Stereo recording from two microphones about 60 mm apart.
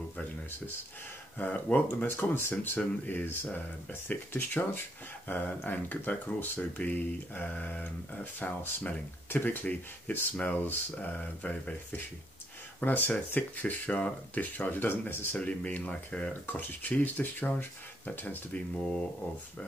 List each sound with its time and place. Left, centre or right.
1.4 s speech: left
2.0 s speech: left
15.3 s speech: left